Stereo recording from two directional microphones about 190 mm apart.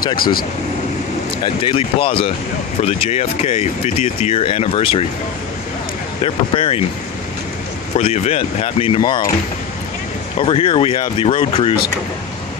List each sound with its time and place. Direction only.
0.2 s speech: 50° left (ahead or behind)
1.4 s speech: 25° left (ahead or behind)
6.2 s speech: 30° left (ahead or behind)
7.9 s speech: 35° left (ahead or behind)
10.4 s speech: 30° left (ahead or behind)